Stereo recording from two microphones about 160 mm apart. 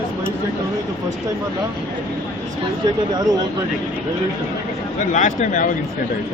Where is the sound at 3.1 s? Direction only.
25° right (ahead or behind).